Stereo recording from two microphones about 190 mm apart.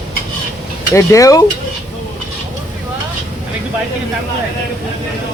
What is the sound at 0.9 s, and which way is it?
Speech, 15° left (ahead or behind).